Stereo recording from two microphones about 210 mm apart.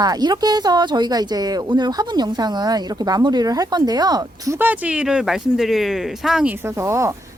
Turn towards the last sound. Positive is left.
turn(degrees=-15)  # may be behind; listen again after turning